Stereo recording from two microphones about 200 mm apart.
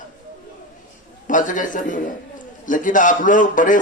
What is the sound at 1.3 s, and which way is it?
A man's voice, 40° left (ahead or behind).